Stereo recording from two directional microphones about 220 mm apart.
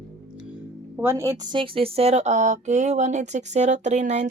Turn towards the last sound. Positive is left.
turn(degrees=-30)  # may be behind; listen again after turning